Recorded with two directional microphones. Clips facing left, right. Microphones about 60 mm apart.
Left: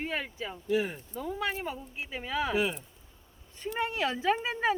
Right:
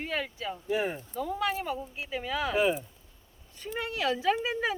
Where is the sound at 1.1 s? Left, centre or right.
Centre.